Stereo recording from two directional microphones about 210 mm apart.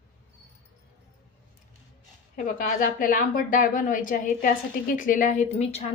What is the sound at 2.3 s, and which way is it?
A woman's voice, 40° left (ahead or behind).